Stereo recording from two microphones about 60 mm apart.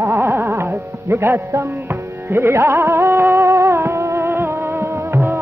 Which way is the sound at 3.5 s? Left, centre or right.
Right.